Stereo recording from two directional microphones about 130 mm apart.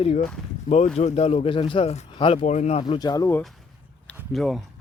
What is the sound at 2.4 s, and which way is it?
Speech, 65° left (ahead or behind).